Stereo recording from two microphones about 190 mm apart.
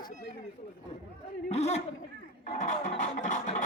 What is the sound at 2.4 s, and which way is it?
Music, 40° left (ahead or behind).